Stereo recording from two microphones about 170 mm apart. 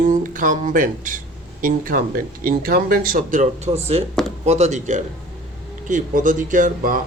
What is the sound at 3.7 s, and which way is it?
Speech, 35° right (ahead or behind).